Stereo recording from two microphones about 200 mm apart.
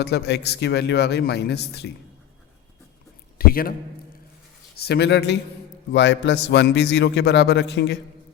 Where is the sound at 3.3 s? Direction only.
45° left (ahead or behind).